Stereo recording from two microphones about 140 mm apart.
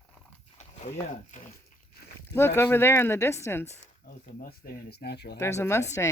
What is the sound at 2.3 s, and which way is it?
Speech, 20° left (ahead or behind).